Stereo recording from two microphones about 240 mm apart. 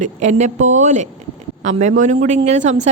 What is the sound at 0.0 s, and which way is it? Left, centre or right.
Speech, right.